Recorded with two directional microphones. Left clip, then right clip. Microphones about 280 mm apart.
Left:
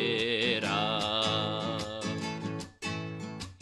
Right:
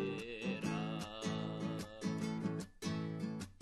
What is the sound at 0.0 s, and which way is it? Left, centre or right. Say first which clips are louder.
Music: left 14 dB; left.